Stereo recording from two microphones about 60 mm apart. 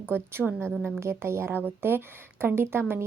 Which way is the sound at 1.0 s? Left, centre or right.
Right.